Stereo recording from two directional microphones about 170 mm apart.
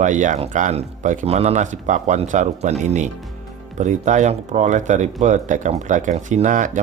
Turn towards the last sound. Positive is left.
turn(degrees=-50)  # may be behind; listen again after turning